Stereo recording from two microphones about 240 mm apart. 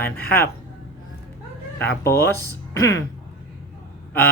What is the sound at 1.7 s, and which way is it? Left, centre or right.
Speech, centre.